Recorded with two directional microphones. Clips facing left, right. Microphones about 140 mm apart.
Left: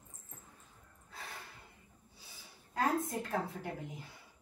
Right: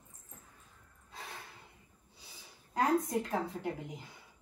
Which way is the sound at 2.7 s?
20° right (ahead or behind).